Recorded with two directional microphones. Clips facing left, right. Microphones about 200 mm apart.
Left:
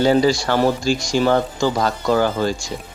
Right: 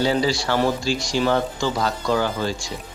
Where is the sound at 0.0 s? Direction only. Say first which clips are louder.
Left 5 dB; 50° left (ahead or behind).